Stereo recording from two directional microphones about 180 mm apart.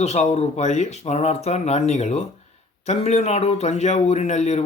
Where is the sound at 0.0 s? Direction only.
40° left (ahead or behind).